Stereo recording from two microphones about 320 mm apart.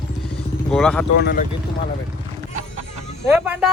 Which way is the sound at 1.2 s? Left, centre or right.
Left.